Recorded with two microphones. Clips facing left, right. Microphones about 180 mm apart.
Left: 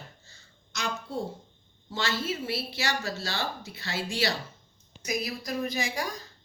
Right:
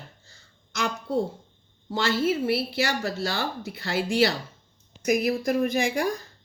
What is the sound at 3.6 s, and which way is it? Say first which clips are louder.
A woman's voice: right 7 dB; 55° right (ahead or behind).